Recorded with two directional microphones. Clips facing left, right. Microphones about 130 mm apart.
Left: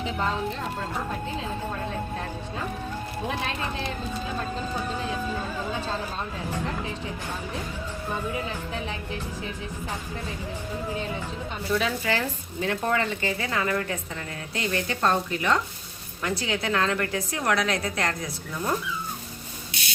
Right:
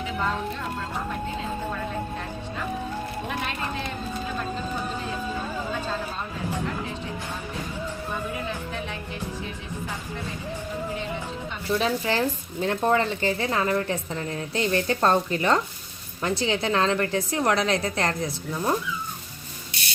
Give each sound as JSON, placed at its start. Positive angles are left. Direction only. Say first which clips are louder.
{"t": 11.7, "sound": "a woman's voice", "louder": "right 2 dB", "side_deg": -30}